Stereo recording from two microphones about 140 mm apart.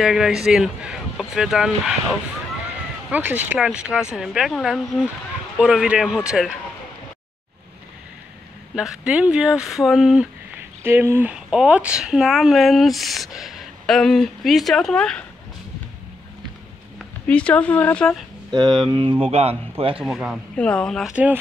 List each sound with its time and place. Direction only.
0.0 s speech: 5° right (ahead or behind)
3.1 s speech: 10° right (ahead or behind)
8.7 s speech: 5° right (ahead or behind)
17.3 s speech: 10° left (ahead or behind)
18.5 s speech: 35° right (ahead or behind)
20.0 s speech: 5° right (ahead or behind)
20.5 s speech: 5° left (ahead or behind)
21.1 s speech: 10° right (ahead or behind)